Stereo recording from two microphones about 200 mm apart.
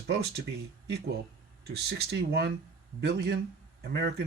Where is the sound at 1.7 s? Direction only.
55° right (ahead or behind).